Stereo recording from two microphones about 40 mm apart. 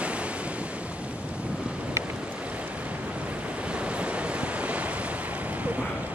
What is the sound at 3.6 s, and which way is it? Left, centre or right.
Waves, right.